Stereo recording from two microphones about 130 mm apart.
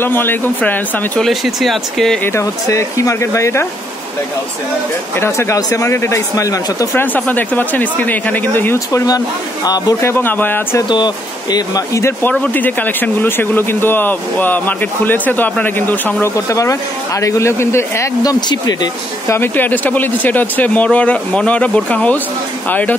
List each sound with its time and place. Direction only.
0.0 s speech: 15° left (ahead or behind)
1.2 s speech: centre (ahead or behind)
2.2 s speech: 20° left (ahead or behind)
5.2 s speech: 20° left (ahead or behind)
10.8 s speech: 35° left (ahead or behind)
18.5 s speech: 30° left (ahead or behind); by 22.9 s 15° left (ahead or behind)